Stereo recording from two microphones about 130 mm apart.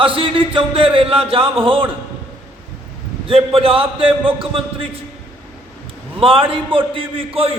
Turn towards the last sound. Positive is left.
turn(degrees=-45)  # may be behind; listen again after turning